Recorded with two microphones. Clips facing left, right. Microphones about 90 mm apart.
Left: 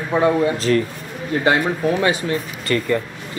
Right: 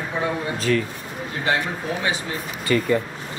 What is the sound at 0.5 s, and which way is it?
Speech, 5° right (ahead or behind).